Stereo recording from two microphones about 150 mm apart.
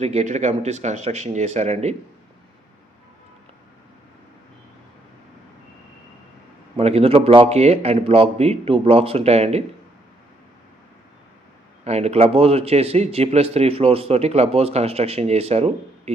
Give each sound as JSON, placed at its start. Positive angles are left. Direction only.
{"t": 0.0, "sound": "a man's voice", "side_deg": -45}
{"t": 6.7, "sound": "a man's voice", "side_deg": -45}
{"t": 11.9, "sound": "a man's voice", "side_deg": -45}